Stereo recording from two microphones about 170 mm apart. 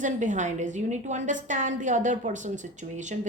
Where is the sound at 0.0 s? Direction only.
45° right (ahead or behind).